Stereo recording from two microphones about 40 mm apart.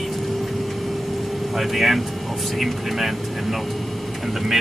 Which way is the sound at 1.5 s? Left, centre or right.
Centre.